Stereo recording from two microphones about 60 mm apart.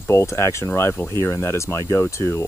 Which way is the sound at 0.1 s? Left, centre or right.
Left.